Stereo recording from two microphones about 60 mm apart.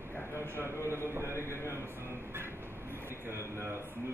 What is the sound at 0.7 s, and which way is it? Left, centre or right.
Speech, right.